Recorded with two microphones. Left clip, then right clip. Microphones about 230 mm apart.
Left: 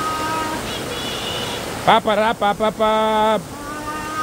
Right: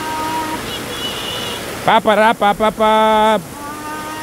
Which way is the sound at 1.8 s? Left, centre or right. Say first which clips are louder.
Right 4 dB; right.